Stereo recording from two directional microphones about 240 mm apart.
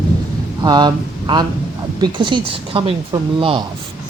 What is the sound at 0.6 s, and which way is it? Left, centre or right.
Speech, centre.